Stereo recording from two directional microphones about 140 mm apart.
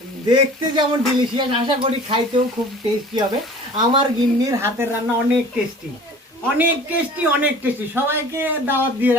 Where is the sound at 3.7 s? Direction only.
30° right (ahead or behind).